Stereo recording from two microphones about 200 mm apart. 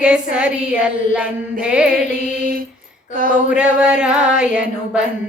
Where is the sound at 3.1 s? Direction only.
45° right (ahead or behind).